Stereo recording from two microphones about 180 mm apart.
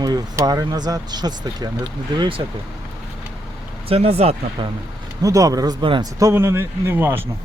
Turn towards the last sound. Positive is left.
turn(degrees=-10)  # may be behind; listen again after turning